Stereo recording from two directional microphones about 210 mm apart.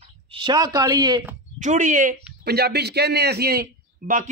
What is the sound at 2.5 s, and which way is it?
A man's voice, 50° right (ahead or behind).